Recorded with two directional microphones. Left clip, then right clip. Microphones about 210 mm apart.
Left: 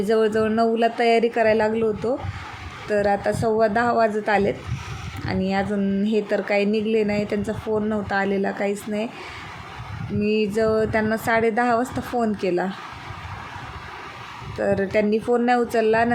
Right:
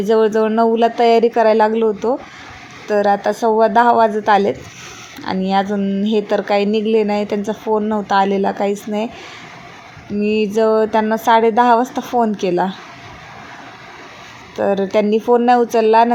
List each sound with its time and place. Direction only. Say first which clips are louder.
0.0 s a woman's voice: right 6 dB; 10° right (ahead or behind)
1.0 s a woman's voice: right 7 dB; 65° right (ahead or behind)
1.5 s a woman's voice: right 6 dB; 15° right (ahead or behind)
10.2 s a woman's voice: right 5 dB; 65° right (ahead or behind)
10.5 s a woman's voice: right 9 dB; 10° right (ahead or behind)
14.5 s a woman's voice: right 5 dB; 10° right (ahead or behind)